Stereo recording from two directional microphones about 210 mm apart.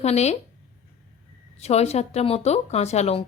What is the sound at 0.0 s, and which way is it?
Speech, 30° left (ahead or behind).